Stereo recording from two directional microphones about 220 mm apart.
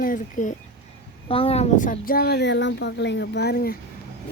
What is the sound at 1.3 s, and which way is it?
Speech, 25° left (ahead or behind).